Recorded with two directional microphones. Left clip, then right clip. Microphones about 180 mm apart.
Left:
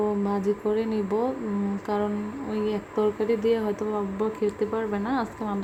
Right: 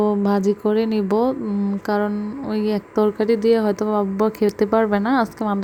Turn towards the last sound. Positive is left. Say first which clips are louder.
# right 8 dB
turn(degrees=-40)  # may be behind; listen again after turning